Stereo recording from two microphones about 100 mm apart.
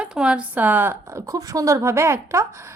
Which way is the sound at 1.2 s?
35° right (ahead or behind).